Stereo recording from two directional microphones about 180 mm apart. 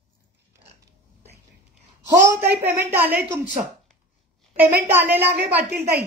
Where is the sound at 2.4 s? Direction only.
10° right (ahead or behind).